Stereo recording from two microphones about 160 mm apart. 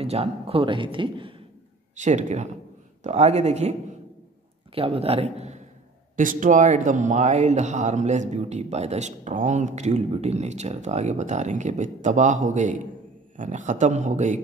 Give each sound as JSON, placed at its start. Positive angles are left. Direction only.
{"t": 0.0, "sound": "speech", "side_deg": -40}
{"t": 2.0, "sound": "speech", "side_deg": -45}
{"t": 4.7, "sound": "speech", "side_deg": -35}
{"t": 6.1, "sound": "speech", "side_deg": -55}